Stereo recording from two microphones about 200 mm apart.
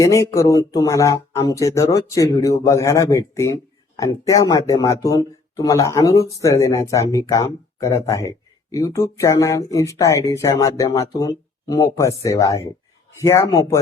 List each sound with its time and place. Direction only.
0.0 s speech: 15° left (ahead or behind)